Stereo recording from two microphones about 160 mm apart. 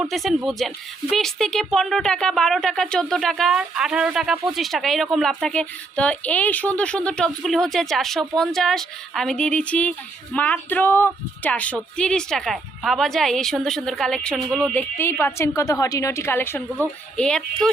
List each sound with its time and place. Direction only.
0.0 s a woman's voice: centre (ahead or behind)